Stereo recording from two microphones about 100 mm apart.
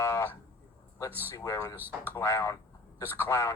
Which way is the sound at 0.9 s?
30° left (ahead or behind).